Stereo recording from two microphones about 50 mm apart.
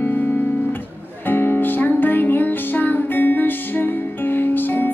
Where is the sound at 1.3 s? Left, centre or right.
Left.